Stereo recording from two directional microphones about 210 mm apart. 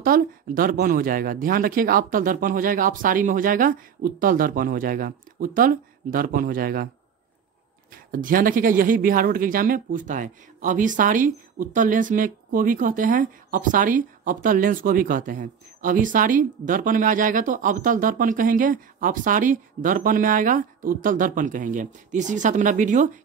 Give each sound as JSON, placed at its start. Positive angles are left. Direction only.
{"t": 0.0, "sound": "speech", "side_deg": -40}
{"t": 7.9, "sound": "speech", "side_deg": -40}